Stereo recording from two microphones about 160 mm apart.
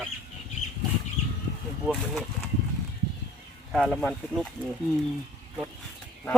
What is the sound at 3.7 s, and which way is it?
Speech, centre (ahead or behind).